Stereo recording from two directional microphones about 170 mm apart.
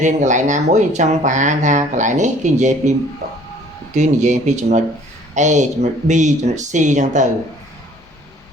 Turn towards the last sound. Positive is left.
turn(degrees=-45)  # may be behind; listen again after turning